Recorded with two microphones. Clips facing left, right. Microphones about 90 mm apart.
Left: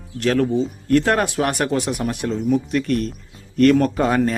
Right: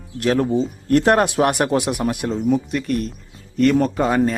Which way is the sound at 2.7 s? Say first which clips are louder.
Left 2 dB; centre (ahead or behind).